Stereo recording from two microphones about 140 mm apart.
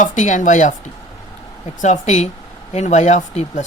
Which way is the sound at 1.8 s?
60° left (ahead or behind).